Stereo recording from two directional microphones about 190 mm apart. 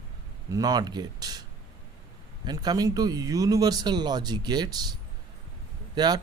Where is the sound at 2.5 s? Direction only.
20° right (ahead or behind).